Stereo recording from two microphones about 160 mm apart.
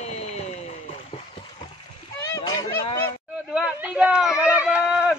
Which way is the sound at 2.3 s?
20° left (ahead or behind).